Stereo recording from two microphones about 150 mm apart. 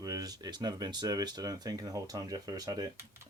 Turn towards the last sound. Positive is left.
turn(degrees=-20)  # may be behind; listen again after turning